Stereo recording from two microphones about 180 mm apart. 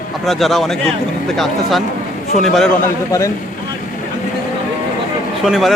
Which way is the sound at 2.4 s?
Centre (ahead or behind).